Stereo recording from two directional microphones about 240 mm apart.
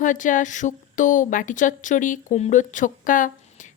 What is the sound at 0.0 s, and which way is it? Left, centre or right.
A woman's voice, left.